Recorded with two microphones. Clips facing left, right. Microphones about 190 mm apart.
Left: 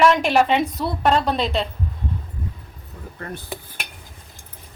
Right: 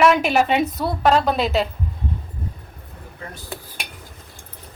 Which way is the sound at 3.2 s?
60° left (ahead or behind).